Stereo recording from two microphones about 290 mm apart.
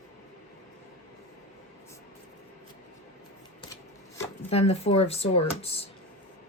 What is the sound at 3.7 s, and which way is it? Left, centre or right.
Speech, centre.